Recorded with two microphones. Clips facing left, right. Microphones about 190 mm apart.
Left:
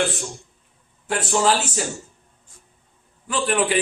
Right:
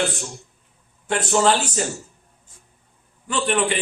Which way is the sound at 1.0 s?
5° left (ahead or behind).